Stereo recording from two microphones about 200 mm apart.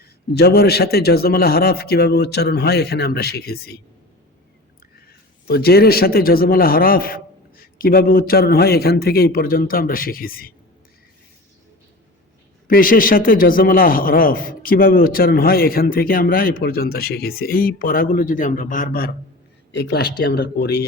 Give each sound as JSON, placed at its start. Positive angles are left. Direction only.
{"t": 0.0, "sound": "a man's voice", "side_deg": 55}
{"t": 5.0, "sound": "a man's voice", "side_deg": 50}
{"t": 12.6, "sound": "a man's voice", "side_deg": 45}
{"t": 19.7, "sound": "speech", "side_deg": 55}